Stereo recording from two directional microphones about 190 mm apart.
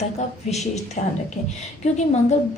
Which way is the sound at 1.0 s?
40° left (ahead or behind).